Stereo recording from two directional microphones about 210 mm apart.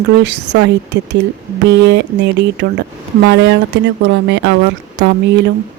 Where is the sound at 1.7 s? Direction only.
55° right (ahead or behind).